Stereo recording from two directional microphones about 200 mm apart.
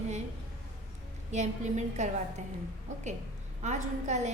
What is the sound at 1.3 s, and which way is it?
Speech, 35° right (ahead or behind).